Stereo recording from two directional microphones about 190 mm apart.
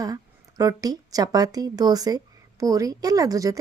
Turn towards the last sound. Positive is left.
turn(degrees=-15)  # may be behind; listen again after turning